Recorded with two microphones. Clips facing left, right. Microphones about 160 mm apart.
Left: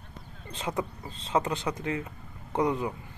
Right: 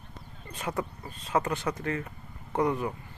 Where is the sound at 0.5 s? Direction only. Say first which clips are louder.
Left 1 dB; 20° left (ahead or behind).